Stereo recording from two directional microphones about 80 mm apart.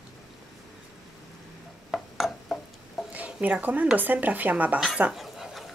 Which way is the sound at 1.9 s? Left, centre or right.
Centre.